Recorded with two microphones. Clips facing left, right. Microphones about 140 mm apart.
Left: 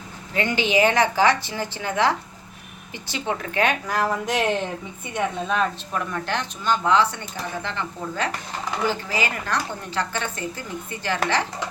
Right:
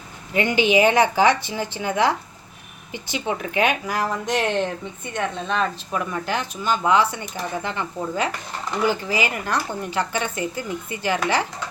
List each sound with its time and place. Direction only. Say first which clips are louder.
0.3 s a woman's voice: right 3 dB; 15° right (ahead or behind)
3.8 s a woman's voice: left 1 dB; centre (ahead or behind)